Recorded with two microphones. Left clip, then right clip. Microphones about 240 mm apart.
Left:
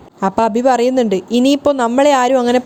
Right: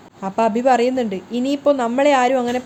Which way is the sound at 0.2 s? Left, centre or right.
Left.